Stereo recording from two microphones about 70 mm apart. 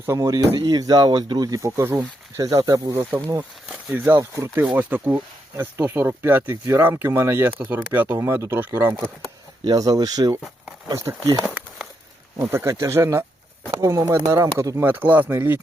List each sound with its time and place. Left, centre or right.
0.2 s speech: right
1.6 s speech: right
2.3 s speech: right
3.9 s speech: right
9.6 s speech: right
10.9 s speech: right
12.4 s speech: right
14.8 s speech: right